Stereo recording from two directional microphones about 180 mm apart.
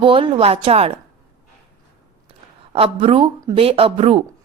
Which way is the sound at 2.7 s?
30° right (ahead or behind).